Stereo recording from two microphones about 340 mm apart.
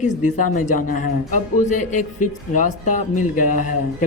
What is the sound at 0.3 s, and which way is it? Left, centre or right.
Speech, left.